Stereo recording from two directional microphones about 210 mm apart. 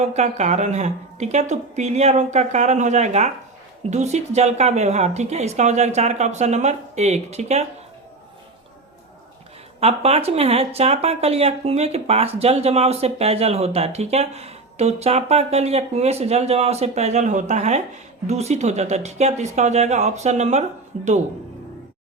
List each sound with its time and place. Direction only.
0.0 s speech: 30° right (ahead or behind)
9.8 s speech: 30° right (ahead or behind)